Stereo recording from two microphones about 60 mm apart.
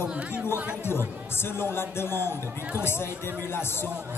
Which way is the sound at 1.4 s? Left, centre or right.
Left.